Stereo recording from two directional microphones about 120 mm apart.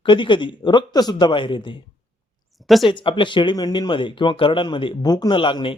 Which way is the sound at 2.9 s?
45° left (ahead or behind).